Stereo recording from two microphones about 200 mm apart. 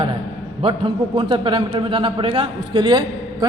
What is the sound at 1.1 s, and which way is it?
A man's voice, 25° right (ahead or behind).